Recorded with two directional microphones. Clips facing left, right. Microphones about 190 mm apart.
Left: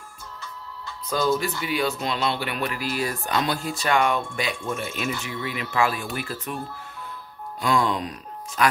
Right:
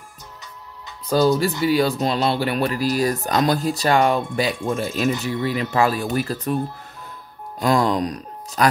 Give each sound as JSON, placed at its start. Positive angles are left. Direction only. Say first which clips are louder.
{"t": 1.0, "sound": "speech", "louder": "right 6 dB", "side_deg": -35}
{"t": 7.6, "sound": "speech", "louder": "right 5 dB", "side_deg": -40}